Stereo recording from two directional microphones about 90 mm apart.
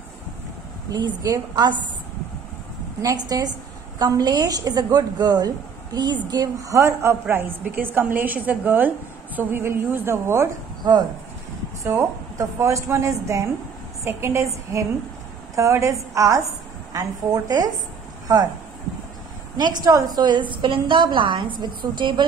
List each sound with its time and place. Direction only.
0.8 s a woman's voice: 50° right (ahead or behind)
3.0 s a woman's voice: 40° right (ahead or behind)
6.7 s a woman's voice: 35° right (ahead or behind)
11.8 s a woman's voice: 35° right (ahead or behind)
19.5 s a woman's voice: 45° right (ahead or behind)